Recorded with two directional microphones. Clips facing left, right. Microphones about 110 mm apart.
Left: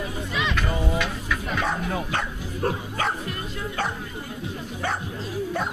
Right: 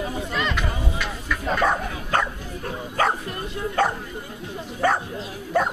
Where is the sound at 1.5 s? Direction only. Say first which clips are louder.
Right 5 dB; 50° right (ahead or behind).